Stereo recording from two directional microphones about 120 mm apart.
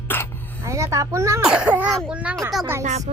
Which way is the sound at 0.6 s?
25° right (ahead or behind).